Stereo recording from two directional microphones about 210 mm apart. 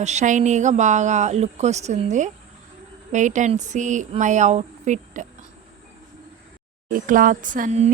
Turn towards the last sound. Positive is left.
turn(degrees=-30)  # may be behind; listen again after turning